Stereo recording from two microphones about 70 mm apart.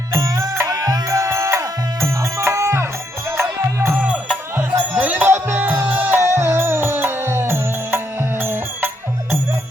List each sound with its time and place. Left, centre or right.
0.2 s music: right
4.0 s music: centre